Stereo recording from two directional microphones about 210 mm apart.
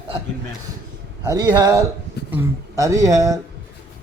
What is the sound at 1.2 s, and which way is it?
Speech, 15° right (ahead or behind).